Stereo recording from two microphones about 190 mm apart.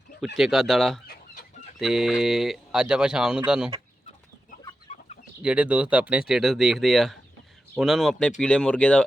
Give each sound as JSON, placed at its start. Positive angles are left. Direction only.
{"t": 0.3, "sound": "speech", "side_deg": 0}
{"t": 4.9, "sound": "chicken", "side_deg": 40}
{"t": 5.4, "sound": "speech", "side_deg": -5}